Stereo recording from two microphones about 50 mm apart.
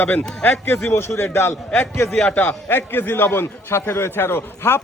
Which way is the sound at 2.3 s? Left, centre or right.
Left.